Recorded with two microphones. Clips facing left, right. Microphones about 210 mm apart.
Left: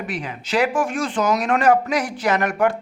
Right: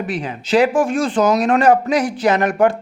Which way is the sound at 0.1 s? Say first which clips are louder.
Right 7 dB; 30° right (ahead or behind).